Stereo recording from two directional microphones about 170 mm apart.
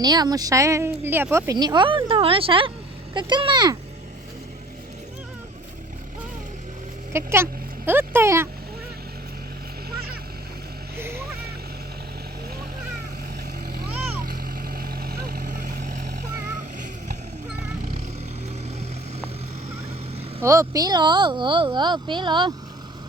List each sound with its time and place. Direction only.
0.0 s speech: 25° right (ahead or behind)
7.1 s speech: 15° right (ahead or behind)
13.7 s vehicle: 60° right (ahead or behind)
20.4 s speech: 20° right (ahead or behind)